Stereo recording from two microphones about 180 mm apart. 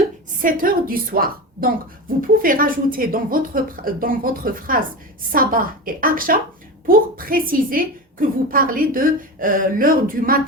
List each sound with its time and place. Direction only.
0.4 s a woman's voice: 50° right (ahead or behind)